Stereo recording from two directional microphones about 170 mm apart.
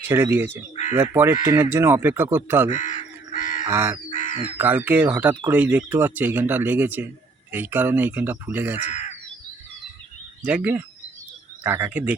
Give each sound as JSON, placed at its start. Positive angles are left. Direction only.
{"t": 0.1, "sound": "speech", "side_deg": -15}
{"t": 2.6, "sound": "crow", "side_deg": 45}
{"t": 3.7, "sound": "speech", "side_deg": -15}
{"t": 4.1, "sound": "a sound", "side_deg": 45}
{"t": 4.5, "sound": "speech", "side_deg": -10}
{"t": 8.9, "sound": "crow", "side_deg": 40}
{"t": 10.4, "sound": "speech", "side_deg": -5}